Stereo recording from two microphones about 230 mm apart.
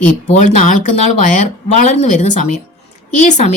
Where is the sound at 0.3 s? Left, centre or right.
Left.